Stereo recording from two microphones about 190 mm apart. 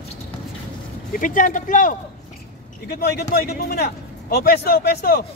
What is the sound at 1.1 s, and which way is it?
Speech, 45° left (ahead or behind).